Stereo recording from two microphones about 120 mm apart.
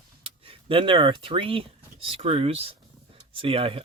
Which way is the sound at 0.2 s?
50° right (ahead or behind).